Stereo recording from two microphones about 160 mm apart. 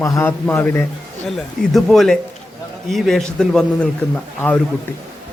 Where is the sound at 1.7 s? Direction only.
Centre (ahead or behind).